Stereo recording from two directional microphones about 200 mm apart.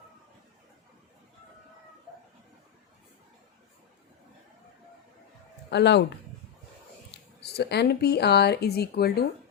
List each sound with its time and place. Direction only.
5.7 s speech: 60° left (ahead or behind)
7.4 s speech: 55° left (ahead or behind)